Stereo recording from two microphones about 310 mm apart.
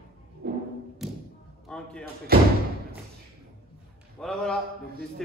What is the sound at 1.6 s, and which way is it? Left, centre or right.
Speech, centre.